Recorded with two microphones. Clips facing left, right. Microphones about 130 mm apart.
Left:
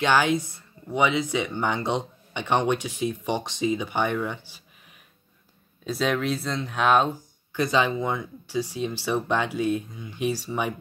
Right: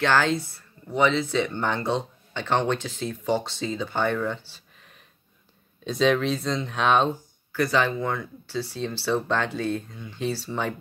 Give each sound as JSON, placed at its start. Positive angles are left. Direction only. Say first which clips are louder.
{"t": 0.0, "sound": "speech", "louder": "left 1 dB", "side_deg": 15}
{"t": 7.5, "sound": "speech", "louder": "even", "side_deg": 20}